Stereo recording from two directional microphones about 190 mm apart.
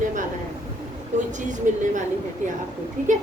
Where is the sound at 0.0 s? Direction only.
45° right (ahead or behind).